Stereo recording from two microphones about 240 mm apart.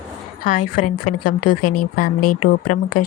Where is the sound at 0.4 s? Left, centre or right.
Left.